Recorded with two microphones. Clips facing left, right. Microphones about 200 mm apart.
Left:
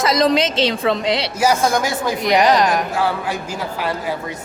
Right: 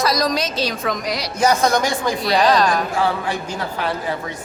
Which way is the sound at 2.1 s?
20° left (ahead or behind).